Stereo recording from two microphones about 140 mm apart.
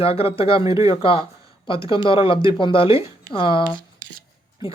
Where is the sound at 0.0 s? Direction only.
40° left (ahead or behind).